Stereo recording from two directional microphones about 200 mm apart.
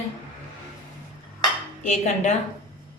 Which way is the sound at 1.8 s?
35° left (ahead or behind).